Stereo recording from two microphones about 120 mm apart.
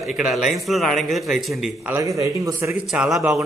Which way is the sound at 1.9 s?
25° right (ahead or behind).